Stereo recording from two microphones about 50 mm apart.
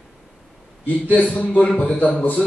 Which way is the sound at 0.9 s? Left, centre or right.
Left.